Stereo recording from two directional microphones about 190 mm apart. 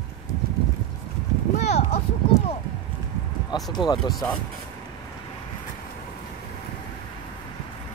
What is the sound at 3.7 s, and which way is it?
Speech, 20° left (ahead or behind).